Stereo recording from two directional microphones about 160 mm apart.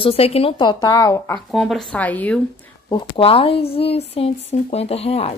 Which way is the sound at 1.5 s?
Centre (ahead or behind).